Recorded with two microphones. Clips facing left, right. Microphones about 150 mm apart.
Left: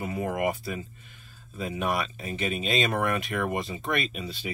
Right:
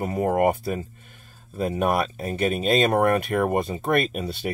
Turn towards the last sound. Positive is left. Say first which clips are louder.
# right 7 dB
turn(degrees=-60)  # may be behind; listen again after turning